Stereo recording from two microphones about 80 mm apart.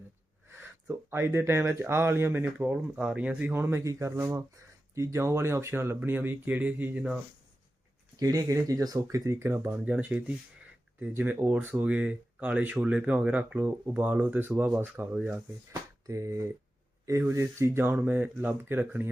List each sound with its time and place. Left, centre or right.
0.4 s speech: right
3.5 s speech: right
8.1 s speech: right
9.6 s speech: centre
15.7 s a sound: right
17.1 s speech: right